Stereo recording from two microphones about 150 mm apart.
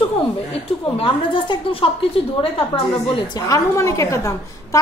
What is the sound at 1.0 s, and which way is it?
A woman's voice, 35° left (ahead or behind).